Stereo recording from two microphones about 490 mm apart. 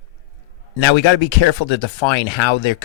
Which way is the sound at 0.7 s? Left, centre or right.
Left.